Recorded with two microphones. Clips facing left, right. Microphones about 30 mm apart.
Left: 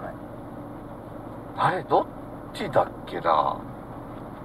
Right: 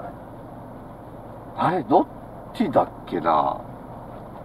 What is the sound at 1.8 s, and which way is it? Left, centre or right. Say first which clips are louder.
Speech: right 7 dB; centre.